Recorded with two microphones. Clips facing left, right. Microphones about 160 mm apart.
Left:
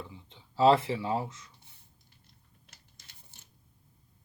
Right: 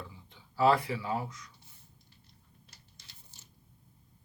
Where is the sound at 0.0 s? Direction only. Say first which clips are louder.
Left 2 dB; 20° left (ahead or behind).